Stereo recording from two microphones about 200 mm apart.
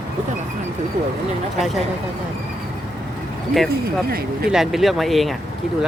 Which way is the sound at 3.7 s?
50° right (ahead or behind).